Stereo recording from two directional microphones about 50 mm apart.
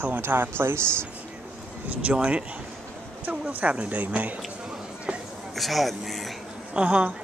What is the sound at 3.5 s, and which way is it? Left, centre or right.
Speech, right.